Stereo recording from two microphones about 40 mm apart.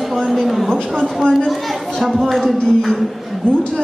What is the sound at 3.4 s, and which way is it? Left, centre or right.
Speech, left.